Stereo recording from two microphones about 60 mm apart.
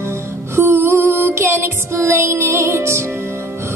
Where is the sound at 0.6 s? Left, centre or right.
Right.